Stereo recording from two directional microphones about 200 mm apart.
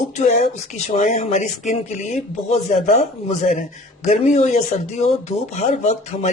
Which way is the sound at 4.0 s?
35° left (ahead or behind).